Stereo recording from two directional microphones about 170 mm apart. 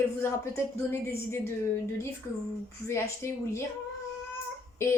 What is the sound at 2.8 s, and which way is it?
Speech, 15° left (ahead or behind).